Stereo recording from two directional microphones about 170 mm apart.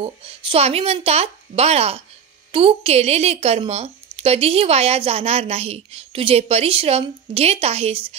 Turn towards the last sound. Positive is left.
turn(degrees=-40)  # may be behind; listen again after turning